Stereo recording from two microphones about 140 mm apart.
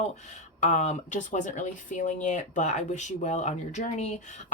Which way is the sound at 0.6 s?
55° left (ahead or behind).